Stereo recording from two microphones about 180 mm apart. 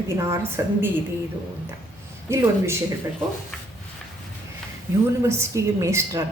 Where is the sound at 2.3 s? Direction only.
15° right (ahead or behind).